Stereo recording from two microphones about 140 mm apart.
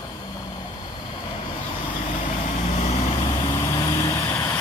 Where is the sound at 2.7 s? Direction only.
50° left (ahead or behind).